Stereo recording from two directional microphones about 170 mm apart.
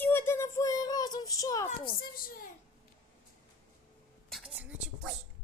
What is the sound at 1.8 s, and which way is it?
Speech, 60° left (ahead or behind).